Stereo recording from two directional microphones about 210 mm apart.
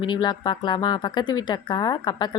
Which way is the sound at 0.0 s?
20° left (ahead or behind).